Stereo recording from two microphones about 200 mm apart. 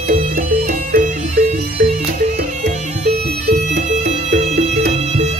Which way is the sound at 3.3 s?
50° right (ahead or behind).